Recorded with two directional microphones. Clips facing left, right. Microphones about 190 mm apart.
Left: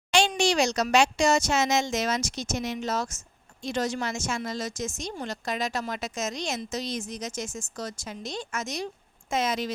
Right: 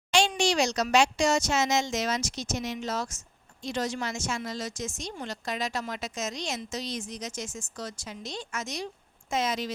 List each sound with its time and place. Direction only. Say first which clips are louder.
0.1 s speech: left 2 dB; 55° left (ahead or behind)